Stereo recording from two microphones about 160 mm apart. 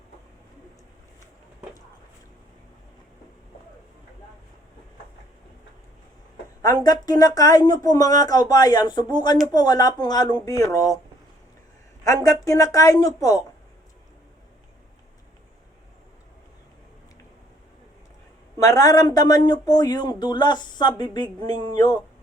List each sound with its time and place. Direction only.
6.8 s speech: 25° left (ahead or behind)
12.0 s speech: 20° left (ahead or behind)
18.6 s speech: 20° left (ahead or behind)